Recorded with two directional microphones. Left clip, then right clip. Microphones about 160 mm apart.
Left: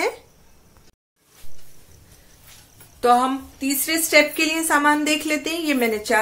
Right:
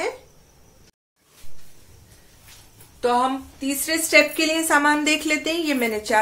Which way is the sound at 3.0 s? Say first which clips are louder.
Left 3 dB; 45° left (ahead or behind).